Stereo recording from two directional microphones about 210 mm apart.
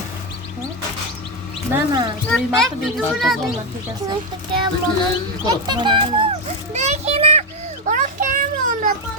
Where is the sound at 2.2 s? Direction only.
Centre (ahead or behind).